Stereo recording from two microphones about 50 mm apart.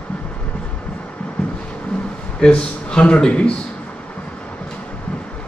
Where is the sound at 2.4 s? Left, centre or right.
Centre.